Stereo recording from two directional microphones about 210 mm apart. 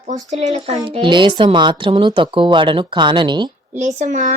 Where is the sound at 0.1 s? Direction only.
30° right (ahead or behind).